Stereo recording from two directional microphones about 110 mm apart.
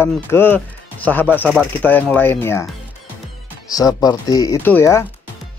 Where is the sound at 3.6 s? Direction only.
35° left (ahead or behind).